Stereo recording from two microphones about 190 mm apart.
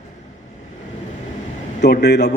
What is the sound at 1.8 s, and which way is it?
Speech, 60° left (ahead or behind).